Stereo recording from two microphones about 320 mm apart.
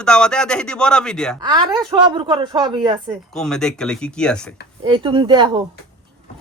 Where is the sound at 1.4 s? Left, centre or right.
Centre.